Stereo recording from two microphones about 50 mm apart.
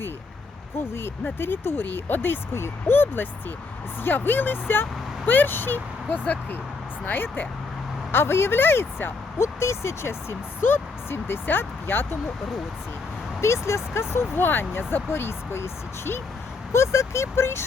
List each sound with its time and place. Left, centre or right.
0.9 s speech: left
2.5 s speech: left
4.0 s speech: left
8.1 s speech: left
9.4 s speech: left
13.4 s speech: left
16.7 s speech: left